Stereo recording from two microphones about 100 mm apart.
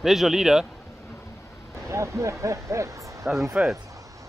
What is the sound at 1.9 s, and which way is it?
Speech, 30° right (ahead or behind).